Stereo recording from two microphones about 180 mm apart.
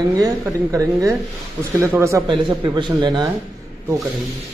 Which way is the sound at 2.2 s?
25° right (ahead or behind).